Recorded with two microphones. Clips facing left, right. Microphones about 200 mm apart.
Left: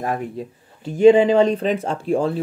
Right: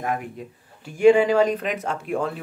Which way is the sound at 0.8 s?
25° left (ahead or behind).